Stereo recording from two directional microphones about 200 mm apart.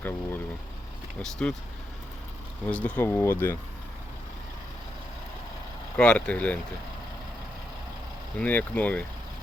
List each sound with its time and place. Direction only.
0.0 s vehicle: 10° left (ahead or behind)
1.2 s speech: 5° left (ahead or behind)
2.6 s speech: 10° left (ahead or behind)
6.0 s speech: 5° left (ahead or behind)
8.4 s speech: 10° left (ahead or behind)